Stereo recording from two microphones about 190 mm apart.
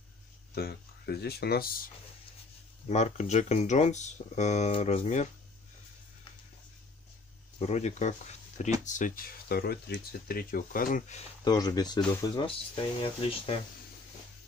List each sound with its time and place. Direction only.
0.6 s speech: 55° left (ahead or behind)
2.9 s speech: 35° left (ahead or behind)
7.5 s speech: 35° left (ahead or behind)
11.4 s speech: 20° left (ahead or behind)